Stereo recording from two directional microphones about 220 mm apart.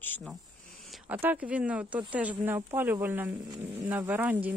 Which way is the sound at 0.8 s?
5° right (ahead or behind).